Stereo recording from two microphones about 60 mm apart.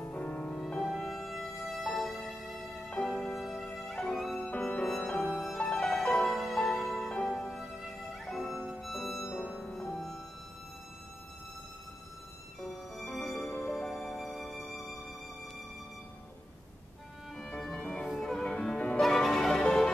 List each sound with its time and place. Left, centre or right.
0.0 s music: left
0.9 s music: centre
4.4 s music: centre
5.6 s music: centre
12.5 s music: centre
17.4 s music: centre
18.9 s music: centre